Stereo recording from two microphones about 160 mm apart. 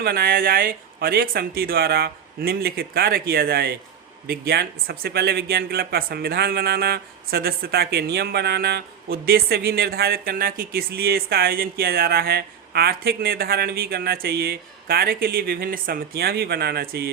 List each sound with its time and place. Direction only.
0.0 s speech: 75° right (ahead or behind)